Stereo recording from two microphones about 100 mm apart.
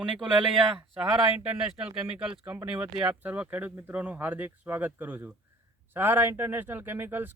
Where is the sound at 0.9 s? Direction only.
10° right (ahead or behind).